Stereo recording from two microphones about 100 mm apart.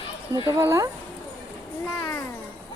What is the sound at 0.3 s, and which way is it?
Speech, 35° right (ahead or behind).